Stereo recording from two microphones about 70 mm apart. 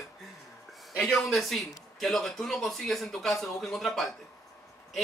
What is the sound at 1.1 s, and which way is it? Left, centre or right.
A man's voice, centre.